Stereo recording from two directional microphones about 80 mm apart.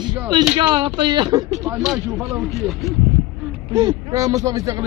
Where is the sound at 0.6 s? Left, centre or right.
Right.